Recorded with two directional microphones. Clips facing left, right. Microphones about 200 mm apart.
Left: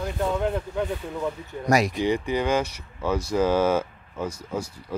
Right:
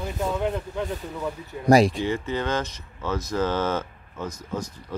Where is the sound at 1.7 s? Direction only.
30° right (ahead or behind).